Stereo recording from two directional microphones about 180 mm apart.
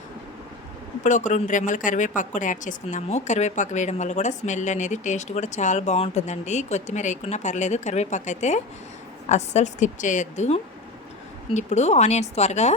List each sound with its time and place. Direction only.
1.0 s speech: 40° left (ahead or behind)